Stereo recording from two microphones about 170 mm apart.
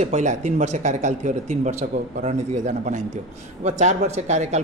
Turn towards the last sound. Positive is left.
turn(degrees=-40)  # may be behind; listen again after turning